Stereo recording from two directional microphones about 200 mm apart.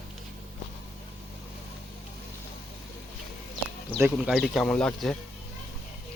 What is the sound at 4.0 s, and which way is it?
Speech, 5° right (ahead or behind).